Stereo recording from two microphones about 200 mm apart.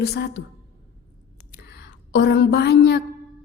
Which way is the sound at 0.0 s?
55° left (ahead or behind).